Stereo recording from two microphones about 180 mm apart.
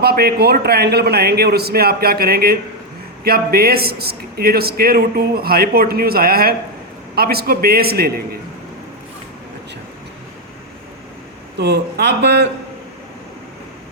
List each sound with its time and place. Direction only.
0.0 s a man's voice: 60° right (ahead or behind)
11.5 s speech: 70° right (ahead or behind)